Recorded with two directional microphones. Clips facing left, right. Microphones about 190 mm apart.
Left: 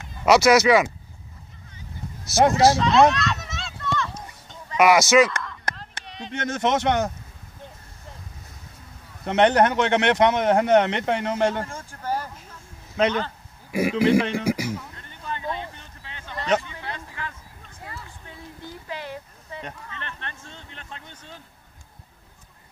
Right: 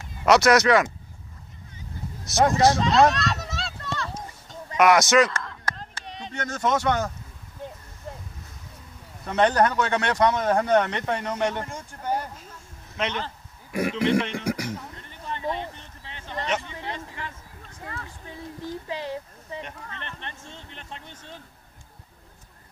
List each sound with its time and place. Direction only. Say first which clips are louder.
0.2 s speech: left 2 dB; 5° left (ahead or behind)
2.5 s speech: left 1 dB; 5° left (ahead or behind)
2.8 s a sound: left 2 dB; 40° right (ahead or behind)
4.7 s speech: left 2 dB; 5° left (ahead or behind)
6.3 s speech: left 2 dB; 25° left (ahead or behind)
9.2 s speech: left 3 dB; 25° left (ahead or behind)
12.9 s speech: left 7 dB; 35° left (ahead or behind)
13.7 s speech: left 4 dB; 5° left (ahead or behind)
15.2 s a sound: right 1 dB; 25° right (ahead or behind)
18.9 s a sound: left 1 dB; 25° right (ahead or behind)